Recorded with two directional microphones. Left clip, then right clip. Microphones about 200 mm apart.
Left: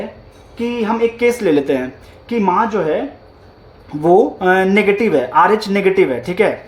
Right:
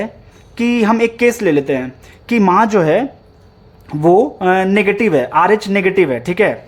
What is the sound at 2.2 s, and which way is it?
Speech, 35° right (ahead or behind).